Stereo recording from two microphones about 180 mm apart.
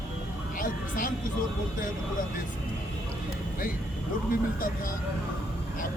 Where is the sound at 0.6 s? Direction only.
50° left (ahead or behind).